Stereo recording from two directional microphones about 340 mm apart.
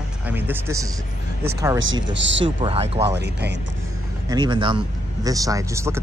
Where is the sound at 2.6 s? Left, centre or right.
Centre.